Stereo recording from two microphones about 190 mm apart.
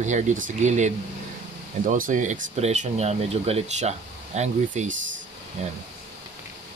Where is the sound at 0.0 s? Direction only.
40° right (ahead or behind).